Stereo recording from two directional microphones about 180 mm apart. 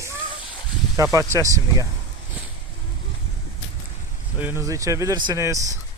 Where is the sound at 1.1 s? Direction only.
15° right (ahead or behind).